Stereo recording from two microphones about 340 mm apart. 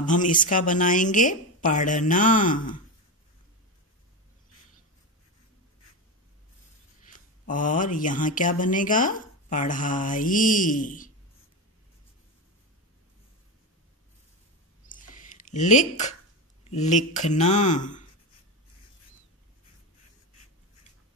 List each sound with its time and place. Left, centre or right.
0.0 s speech: left
7.1 s speech: left
14.9 s a sound: left
16.6 s speech: centre